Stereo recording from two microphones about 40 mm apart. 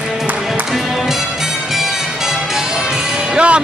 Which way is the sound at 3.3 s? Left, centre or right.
Right.